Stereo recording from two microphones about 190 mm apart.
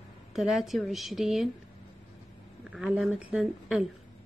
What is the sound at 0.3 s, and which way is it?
A woman's voice, centre (ahead or behind).